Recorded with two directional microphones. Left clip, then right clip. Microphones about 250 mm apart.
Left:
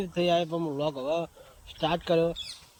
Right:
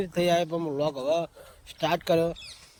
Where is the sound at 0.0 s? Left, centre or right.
Centre.